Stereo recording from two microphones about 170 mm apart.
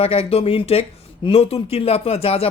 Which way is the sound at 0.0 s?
35° left (ahead or behind).